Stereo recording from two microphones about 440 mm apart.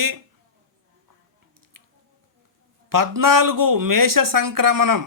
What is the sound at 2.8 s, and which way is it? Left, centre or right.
Speech, right.